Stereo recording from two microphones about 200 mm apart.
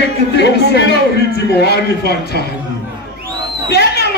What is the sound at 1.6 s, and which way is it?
Speech, 55° left (ahead or behind).